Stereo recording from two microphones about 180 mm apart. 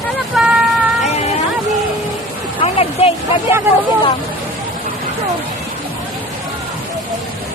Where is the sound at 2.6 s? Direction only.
35° left (ahead or behind).